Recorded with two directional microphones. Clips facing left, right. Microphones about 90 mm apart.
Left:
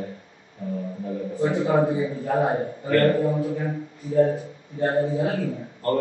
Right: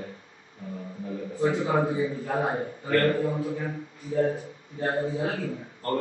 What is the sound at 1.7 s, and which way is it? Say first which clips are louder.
A man's voice: left 4 dB; 30° left (ahead or behind).